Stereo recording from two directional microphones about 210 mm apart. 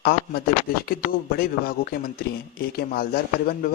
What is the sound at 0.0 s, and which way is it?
Speech, 50° left (ahead or behind).